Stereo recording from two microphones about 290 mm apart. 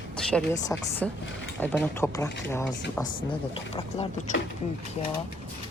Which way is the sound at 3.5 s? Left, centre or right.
Centre.